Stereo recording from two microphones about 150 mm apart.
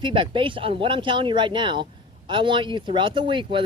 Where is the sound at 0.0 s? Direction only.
35° right (ahead or behind).